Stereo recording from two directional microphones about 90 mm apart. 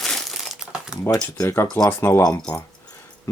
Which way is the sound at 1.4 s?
35° left (ahead or behind).